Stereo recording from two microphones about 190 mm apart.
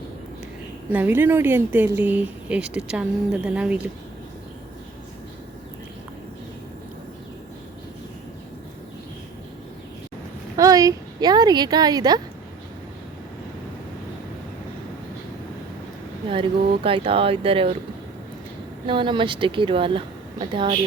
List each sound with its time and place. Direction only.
0.9 s speech: 10° right (ahead or behind)
10.6 s a sound: 20° right (ahead or behind)
16.8 s speech: 30° right (ahead or behind)
18.9 s speech: 25° right (ahead or behind)